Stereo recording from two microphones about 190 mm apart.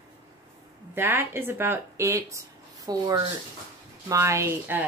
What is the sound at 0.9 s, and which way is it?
Speech, 10° right (ahead or behind).